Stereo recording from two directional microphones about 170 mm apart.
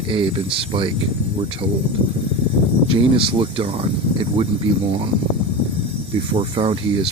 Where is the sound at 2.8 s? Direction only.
30° right (ahead or behind).